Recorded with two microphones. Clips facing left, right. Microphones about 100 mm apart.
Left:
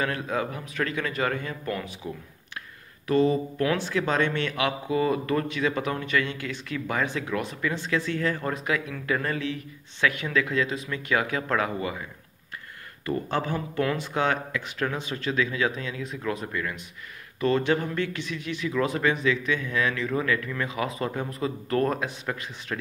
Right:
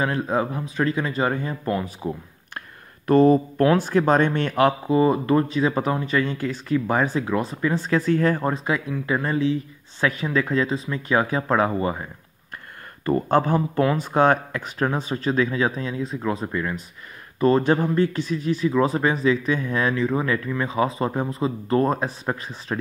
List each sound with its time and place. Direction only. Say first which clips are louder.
0.0 s speech: right 5 dB; 30° right (ahead or behind)
3.1 s speech: right 7 dB; 50° right (ahead or behind)
4.9 s speech: right 4 dB; 30° right (ahead or behind)
8.5 s speech: right 4 dB; 30° right (ahead or behind)